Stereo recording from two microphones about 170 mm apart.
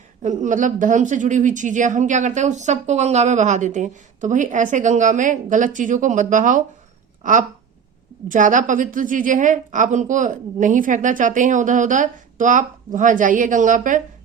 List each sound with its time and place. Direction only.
0.2 s speech: 45° right (ahead or behind)